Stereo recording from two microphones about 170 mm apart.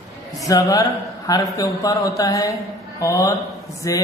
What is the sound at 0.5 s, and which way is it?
A man's voice, 20° left (ahead or behind).